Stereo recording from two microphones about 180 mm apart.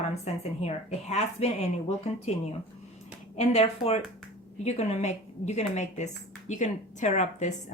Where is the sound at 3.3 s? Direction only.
35° left (ahead or behind).